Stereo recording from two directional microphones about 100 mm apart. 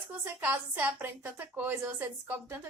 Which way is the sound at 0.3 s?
20° right (ahead or behind).